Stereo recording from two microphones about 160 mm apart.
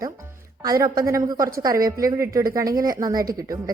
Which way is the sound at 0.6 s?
25° right (ahead or behind).